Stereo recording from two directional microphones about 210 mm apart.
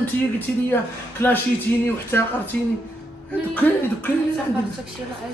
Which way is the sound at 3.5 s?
5° left (ahead or behind).